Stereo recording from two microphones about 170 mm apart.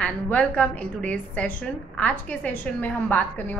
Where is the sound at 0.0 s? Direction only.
10° left (ahead or behind).